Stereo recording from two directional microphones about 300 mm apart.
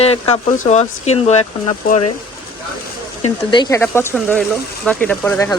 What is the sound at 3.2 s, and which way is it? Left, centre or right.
Speech, centre.